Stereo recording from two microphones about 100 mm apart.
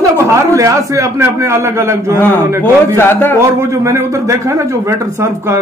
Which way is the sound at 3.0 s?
25° left (ahead or behind).